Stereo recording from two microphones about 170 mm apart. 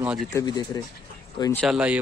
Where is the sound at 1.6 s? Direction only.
5° right (ahead or behind).